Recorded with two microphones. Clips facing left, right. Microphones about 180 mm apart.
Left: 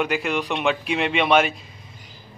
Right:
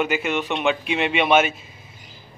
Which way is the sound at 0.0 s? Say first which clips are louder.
Right 1 dB; centre (ahead or behind).